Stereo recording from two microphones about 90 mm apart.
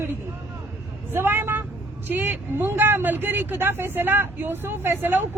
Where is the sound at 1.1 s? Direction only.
25° right (ahead or behind).